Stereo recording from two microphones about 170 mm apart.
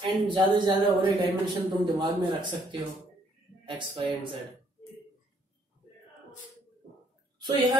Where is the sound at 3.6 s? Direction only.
30° right (ahead or behind).